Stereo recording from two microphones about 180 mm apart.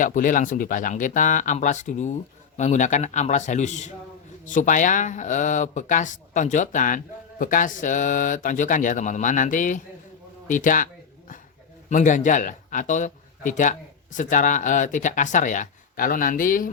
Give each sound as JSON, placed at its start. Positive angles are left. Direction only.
{"t": 0.0, "sound": "a man's voice", "side_deg": 45}
{"t": 11.9, "sound": "speech", "side_deg": 45}